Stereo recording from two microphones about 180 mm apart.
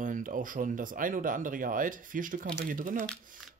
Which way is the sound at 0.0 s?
45° right (ahead or behind).